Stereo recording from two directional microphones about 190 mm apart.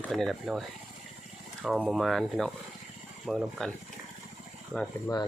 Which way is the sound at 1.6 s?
Centre (ahead or behind).